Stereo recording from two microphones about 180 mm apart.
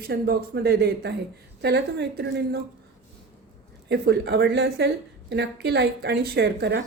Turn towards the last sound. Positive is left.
turn(degrees=-65)  # may be behind; listen again after turning